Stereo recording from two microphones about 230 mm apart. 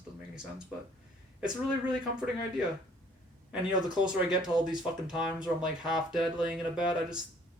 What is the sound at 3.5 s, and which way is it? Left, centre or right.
Speech, centre.